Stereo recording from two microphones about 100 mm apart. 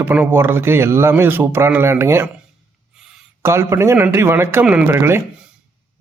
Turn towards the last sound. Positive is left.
turn(degrees=-25)  # may be behind; listen again after turning